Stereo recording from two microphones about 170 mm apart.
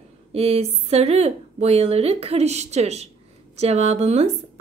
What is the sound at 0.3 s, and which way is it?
A woman's voice, 35° right (ahead or behind).